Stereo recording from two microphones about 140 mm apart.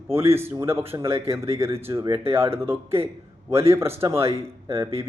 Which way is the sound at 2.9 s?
45° right (ahead or behind).